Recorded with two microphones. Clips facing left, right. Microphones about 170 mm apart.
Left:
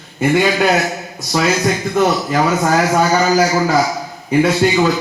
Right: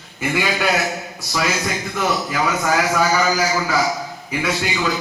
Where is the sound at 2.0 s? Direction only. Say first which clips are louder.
Left 5 dB; 45° left (ahead or behind).